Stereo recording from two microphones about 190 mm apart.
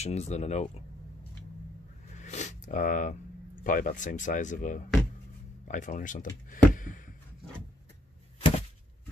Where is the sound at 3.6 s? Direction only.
45° left (ahead or behind).